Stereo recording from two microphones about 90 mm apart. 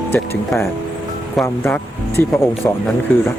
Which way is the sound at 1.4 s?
25° left (ahead or behind).